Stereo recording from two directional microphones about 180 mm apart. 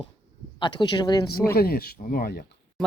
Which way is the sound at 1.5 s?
60° left (ahead or behind).